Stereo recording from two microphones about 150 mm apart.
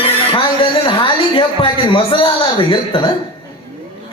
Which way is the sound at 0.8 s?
35° left (ahead or behind).